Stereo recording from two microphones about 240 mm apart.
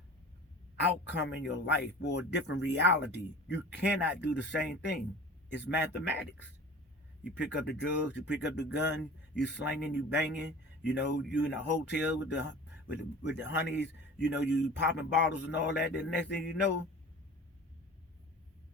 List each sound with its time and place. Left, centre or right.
0.8 s speech: left
7.5 s speech: left